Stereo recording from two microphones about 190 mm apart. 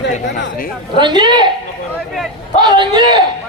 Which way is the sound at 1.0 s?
25° right (ahead or behind).